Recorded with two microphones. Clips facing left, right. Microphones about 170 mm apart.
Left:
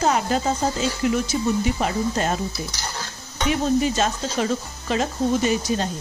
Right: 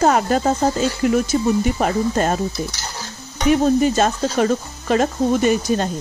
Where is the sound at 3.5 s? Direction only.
45° right (ahead or behind).